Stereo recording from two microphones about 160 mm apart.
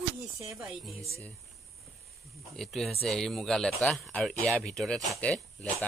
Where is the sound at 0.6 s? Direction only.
Centre (ahead or behind).